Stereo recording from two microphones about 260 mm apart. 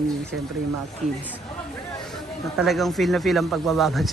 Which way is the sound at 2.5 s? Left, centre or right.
Centre.